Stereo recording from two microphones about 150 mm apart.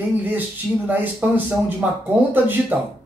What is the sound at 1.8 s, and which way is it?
A man's voice, 10° right (ahead or behind).